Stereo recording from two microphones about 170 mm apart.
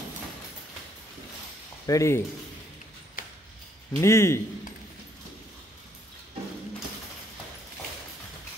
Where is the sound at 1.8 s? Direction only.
20° left (ahead or behind).